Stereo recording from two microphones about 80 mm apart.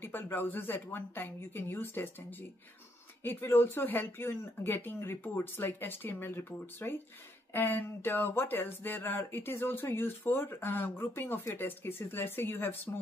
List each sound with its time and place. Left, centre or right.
0.0 s speech: left
3.3 s speech: left